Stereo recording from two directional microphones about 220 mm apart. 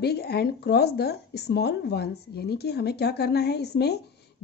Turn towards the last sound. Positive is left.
turn(degrees=45)  # may be behind; listen again after turning